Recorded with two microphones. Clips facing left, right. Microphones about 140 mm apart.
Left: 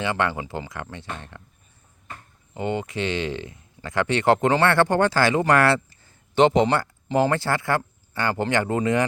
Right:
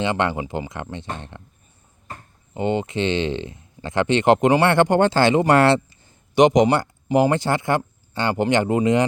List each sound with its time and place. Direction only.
0.0 s speech: 20° right (ahead or behind)
2.6 s speech: 20° right (ahead or behind)